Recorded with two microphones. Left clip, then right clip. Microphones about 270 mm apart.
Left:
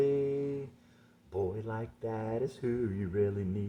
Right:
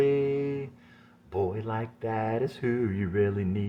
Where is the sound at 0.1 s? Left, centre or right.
Right.